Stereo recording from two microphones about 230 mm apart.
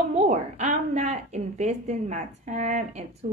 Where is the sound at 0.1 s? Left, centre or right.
Right.